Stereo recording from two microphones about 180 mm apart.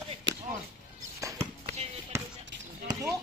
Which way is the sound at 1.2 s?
15° right (ahead or behind).